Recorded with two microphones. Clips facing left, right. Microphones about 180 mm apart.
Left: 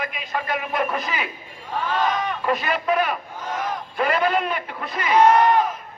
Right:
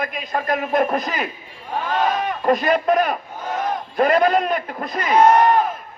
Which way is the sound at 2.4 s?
40° right (ahead or behind).